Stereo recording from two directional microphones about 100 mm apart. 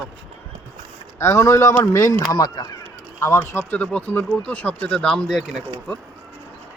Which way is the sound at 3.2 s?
25° left (ahead or behind).